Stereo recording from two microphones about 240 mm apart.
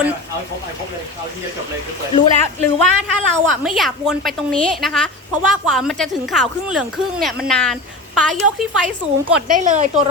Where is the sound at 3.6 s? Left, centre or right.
Centre.